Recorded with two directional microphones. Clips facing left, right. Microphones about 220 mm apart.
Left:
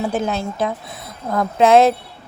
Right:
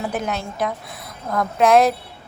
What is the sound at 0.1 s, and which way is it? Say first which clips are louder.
A woman's voice: left 4 dB; 30° left (ahead or behind).